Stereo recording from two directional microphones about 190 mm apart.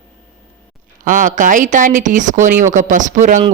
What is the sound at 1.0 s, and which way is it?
Speech, 45° right (ahead or behind).